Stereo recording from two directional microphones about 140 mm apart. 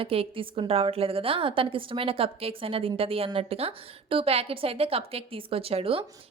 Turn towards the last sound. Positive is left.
turn(degrees=-40)  # may be behind; listen again after turning